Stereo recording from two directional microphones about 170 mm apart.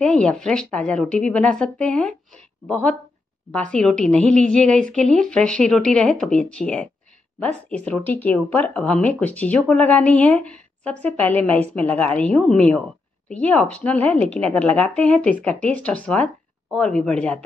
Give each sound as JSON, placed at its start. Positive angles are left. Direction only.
{"t": 0.0, "sound": "speech", "side_deg": 5}